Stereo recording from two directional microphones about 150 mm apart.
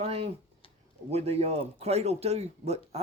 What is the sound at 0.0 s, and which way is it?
Speech, 40° right (ahead or behind).